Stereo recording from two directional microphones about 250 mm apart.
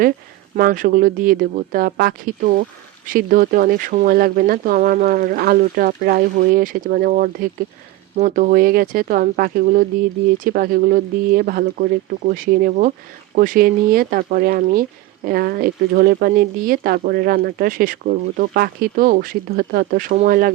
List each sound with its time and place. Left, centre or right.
0.5 s speech: right